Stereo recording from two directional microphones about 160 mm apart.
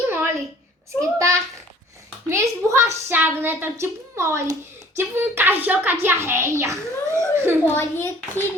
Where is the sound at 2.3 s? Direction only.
20° right (ahead or behind).